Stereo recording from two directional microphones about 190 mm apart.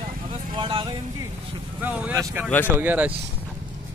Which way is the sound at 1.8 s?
10° right (ahead or behind).